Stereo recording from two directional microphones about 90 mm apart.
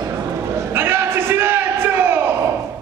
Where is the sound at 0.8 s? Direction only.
25° right (ahead or behind).